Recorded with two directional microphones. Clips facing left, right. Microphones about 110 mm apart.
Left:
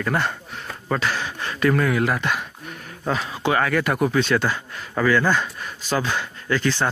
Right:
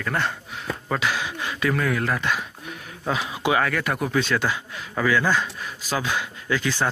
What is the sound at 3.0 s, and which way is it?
A man's voice, 5° right (ahead or behind).